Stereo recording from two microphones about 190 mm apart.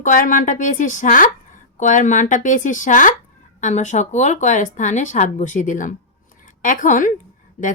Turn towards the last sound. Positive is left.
turn(degrees=45)  # may be behind; listen again after turning